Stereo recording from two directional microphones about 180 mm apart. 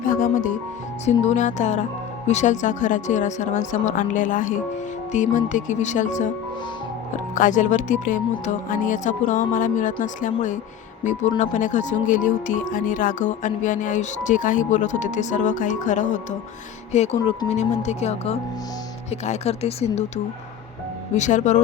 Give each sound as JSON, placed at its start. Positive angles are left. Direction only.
{"t": 0.0, "sound": "music", "side_deg": 50}
{"t": 1.0, "sound": "speech", "side_deg": 40}
{"t": 7.3, "sound": "speech", "side_deg": 45}
{"t": 21.2, "sound": "speech", "side_deg": 40}